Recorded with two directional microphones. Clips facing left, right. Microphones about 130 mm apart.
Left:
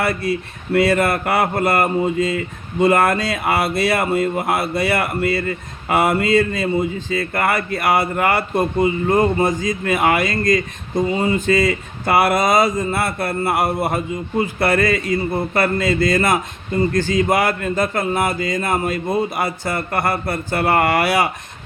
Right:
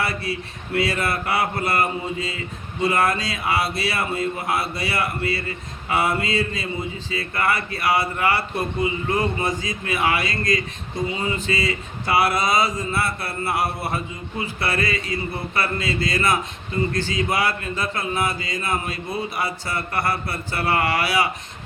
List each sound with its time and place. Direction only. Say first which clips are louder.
0.0 s speech: left 6 dB; 50° left (ahead or behind)